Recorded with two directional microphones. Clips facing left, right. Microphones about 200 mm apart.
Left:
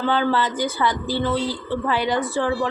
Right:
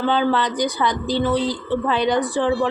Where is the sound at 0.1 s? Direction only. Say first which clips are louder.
Even; 20° right (ahead or behind).